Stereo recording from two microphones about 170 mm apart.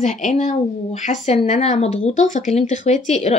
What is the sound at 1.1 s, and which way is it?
Speech, 40° left (ahead or behind).